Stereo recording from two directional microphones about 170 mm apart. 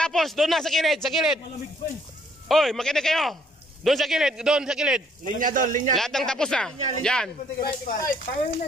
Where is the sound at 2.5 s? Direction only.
Centre (ahead or behind).